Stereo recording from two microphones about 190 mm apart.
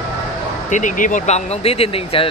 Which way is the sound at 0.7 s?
40° left (ahead or behind).